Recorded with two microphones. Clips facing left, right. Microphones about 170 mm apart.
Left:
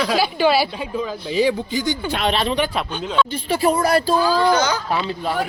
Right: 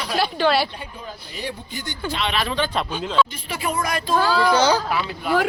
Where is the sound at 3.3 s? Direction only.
30° left (ahead or behind).